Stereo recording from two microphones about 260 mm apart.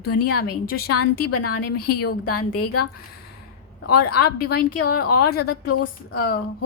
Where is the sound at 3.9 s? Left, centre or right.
Left.